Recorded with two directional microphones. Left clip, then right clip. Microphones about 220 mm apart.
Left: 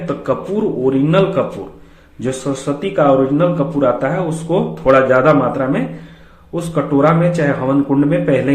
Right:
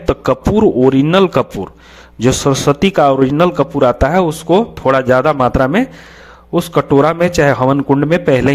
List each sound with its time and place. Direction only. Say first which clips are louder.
0.0 s a man's voice: right 5 dB; 45° right (ahead or behind)